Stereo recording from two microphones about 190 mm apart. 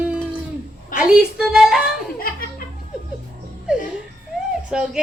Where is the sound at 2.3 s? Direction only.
50° left (ahead or behind).